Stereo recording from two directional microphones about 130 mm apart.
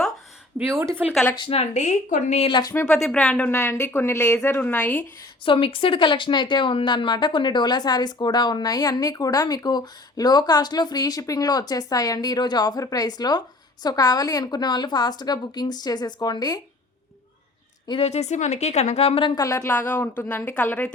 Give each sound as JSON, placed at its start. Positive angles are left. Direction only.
{"t": 0.6, "sound": "speech", "side_deg": -20}
{"t": 1.4, "sound": "speech", "side_deg": 50}
{"t": 2.4, "sound": "speech", "side_deg": 35}
{"t": 2.8, "sound": "speech", "side_deg": 5}
{"t": 3.5, "sound": "a woman's voice", "side_deg": 20}
{"t": 5.5, "sound": "speech", "side_deg": 45}
{"t": 18.0, "sound": "speech", "side_deg": 60}
{"t": 19.4, "sound": "a woman's voice", "side_deg": 25}